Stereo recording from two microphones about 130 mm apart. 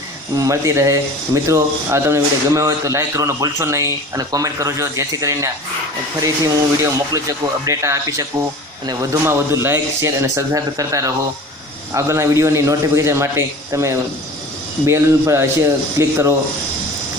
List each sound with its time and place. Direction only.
0.4 s speech: 25° right (ahead or behind)